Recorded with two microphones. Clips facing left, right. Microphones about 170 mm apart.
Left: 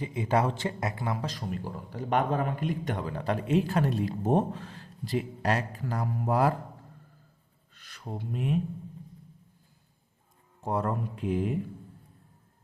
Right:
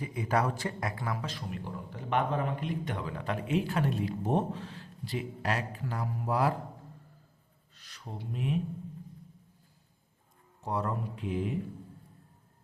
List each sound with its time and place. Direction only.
0.0 s a man's voice: 25° left (ahead or behind)
1.2 s speech: 40° left (ahead or behind)
7.8 s a sound: 55° left (ahead or behind)
10.6 s speech: 50° left (ahead or behind)